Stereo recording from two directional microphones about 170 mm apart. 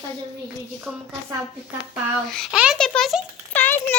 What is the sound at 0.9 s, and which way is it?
Speech, 5° right (ahead or behind).